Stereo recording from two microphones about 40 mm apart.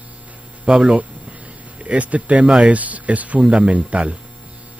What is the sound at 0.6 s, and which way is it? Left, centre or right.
Speech, right.